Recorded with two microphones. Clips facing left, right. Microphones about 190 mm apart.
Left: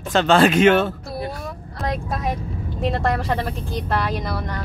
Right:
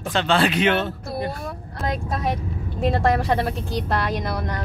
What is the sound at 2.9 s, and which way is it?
Speech, centre (ahead or behind).